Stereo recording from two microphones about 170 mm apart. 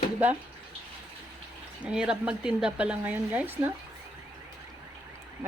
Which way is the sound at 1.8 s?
5° right (ahead or behind).